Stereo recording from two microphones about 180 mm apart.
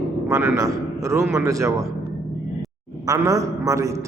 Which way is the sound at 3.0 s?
20° right (ahead or behind).